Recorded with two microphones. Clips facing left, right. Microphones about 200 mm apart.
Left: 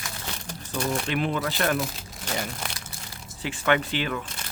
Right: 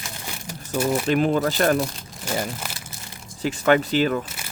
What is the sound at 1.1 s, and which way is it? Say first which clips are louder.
Speech: right 7 dB; 40° right (ahead or behind).